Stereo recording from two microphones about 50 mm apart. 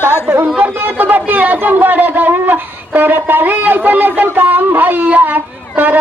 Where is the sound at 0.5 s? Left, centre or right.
Right.